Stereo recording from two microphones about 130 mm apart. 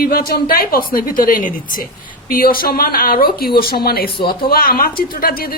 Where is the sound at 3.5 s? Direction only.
40° left (ahead or behind).